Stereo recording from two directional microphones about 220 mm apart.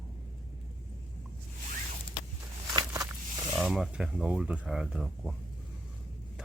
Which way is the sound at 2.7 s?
15° right (ahead or behind).